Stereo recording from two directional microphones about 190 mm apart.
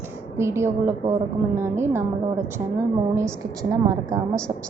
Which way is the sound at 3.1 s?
15° right (ahead or behind).